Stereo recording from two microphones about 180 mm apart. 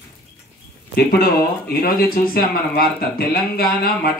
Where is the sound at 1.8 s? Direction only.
55° left (ahead or behind).